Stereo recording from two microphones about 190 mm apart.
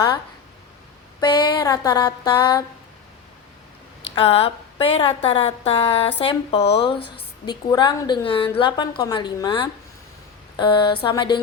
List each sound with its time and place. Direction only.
1.2 s a woman's voice: 20° left (ahead or behind)
4.1 s a woman's voice: 30° left (ahead or behind)